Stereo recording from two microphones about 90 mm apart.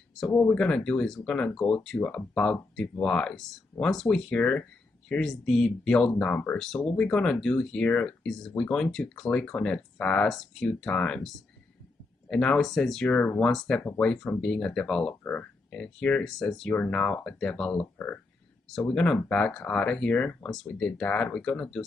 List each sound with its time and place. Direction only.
0.3 s speech: 15° left (ahead or behind)
13.0 s speech: 15° left (ahead or behind)
20.4 s speech: 5° left (ahead or behind)